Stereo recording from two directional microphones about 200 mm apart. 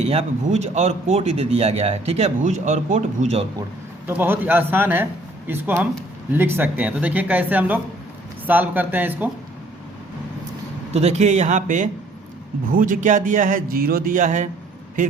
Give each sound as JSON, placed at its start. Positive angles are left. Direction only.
{"t": 0.1, "sound": "a man's voice", "side_deg": -30}
{"t": 4.0, "sound": "speech", "side_deg": -10}
{"t": 10.9, "sound": "a man's voice", "side_deg": -35}